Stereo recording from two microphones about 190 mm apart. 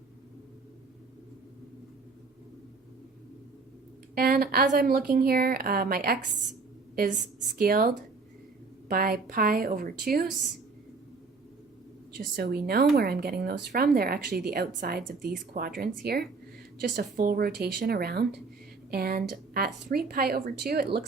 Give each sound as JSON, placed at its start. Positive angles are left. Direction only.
{"t": 4.1, "sound": "speech", "side_deg": -55}
{"t": 12.4, "sound": "speech", "side_deg": -55}